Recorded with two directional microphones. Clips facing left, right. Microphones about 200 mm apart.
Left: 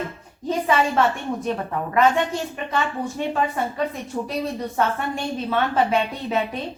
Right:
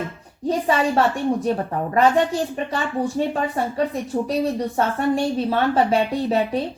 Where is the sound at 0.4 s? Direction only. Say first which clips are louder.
Right 1 dB; 35° right (ahead or behind).